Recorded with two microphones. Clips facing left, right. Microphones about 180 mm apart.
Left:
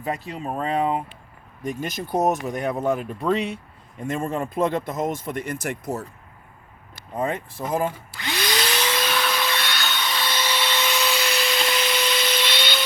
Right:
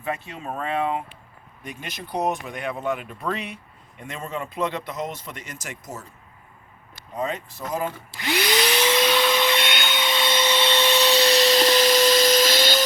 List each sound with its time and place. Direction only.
0.0 s speech: 35° left (ahead or behind)
3.3 s speech: 25° left (ahead or behind)
4.0 s speech: 50° left (ahead or behind)
7.2 s speech: 55° left (ahead or behind)
8.1 s vacuum cleaner: 20° right (ahead or behind); by 12.8 s 40° right (ahead or behind)